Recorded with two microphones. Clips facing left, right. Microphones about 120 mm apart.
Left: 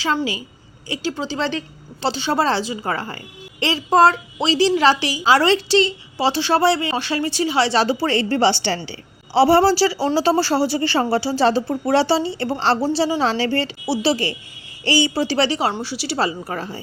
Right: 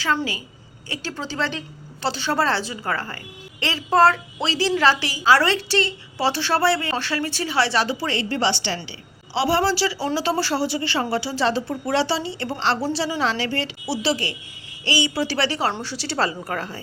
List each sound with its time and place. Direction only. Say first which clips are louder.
0.0 s a woman's voice: left 2 dB; 15° left (ahead or behind)
8.0 s a woman's voice: left 5 dB; 45° left (ahead or behind)
15.3 s a woman's voice: left 4 dB; 25° left (ahead or behind)